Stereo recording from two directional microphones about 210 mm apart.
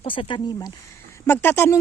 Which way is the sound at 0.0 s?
25° left (ahead or behind).